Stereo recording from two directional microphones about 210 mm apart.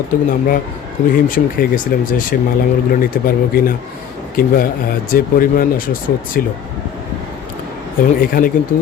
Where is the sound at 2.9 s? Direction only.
45° left (ahead or behind).